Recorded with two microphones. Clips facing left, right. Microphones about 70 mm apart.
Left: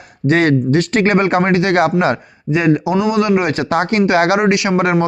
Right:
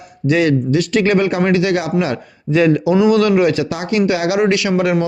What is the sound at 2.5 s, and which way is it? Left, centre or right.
Speech, left.